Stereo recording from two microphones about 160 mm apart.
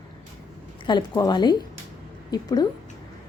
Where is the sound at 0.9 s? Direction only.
25° left (ahead or behind).